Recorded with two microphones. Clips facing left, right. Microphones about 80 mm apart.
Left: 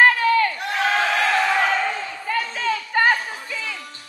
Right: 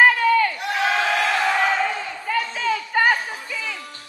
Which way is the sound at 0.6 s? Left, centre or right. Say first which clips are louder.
Even; left.